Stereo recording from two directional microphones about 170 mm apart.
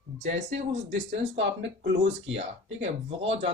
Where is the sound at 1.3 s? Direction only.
90° right.